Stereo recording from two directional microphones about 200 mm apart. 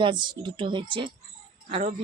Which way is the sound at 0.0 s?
25° right (ahead or behind).